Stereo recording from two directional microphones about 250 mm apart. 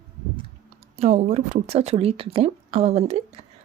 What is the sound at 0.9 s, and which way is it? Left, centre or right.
A woman's voice, right.